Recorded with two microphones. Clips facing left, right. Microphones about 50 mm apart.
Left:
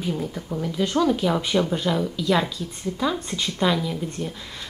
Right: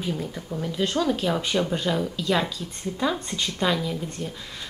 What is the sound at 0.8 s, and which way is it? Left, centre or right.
Speech, centre.